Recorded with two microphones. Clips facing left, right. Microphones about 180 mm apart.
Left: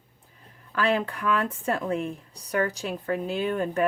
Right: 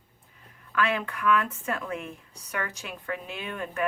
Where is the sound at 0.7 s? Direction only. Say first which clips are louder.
Left 3 dB; 35° left (ahead or behind).